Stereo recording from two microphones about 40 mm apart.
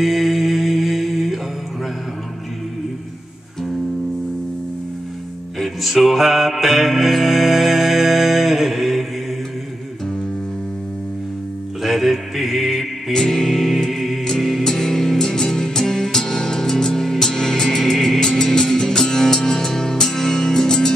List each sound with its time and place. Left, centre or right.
0.0 s music: centre
5.6 s music: centre
11.8 s music: centre
13.1 s music: centre
14.2 s music: centre